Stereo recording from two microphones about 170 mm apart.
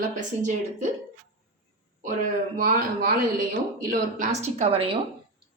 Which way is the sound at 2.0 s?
55° right (ahead or behind).